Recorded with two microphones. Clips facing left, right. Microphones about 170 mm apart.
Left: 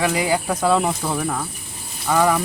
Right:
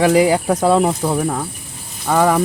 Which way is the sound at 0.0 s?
40° right (ahead or behind).